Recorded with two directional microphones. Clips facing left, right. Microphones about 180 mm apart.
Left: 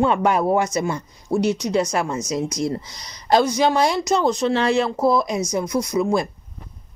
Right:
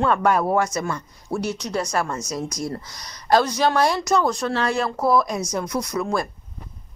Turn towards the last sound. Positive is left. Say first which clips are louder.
# left 4 dB
turn(degrees=15)  # may be behind; listen again after turning